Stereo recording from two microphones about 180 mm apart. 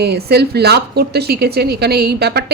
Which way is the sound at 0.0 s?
65° right (ahead or behind).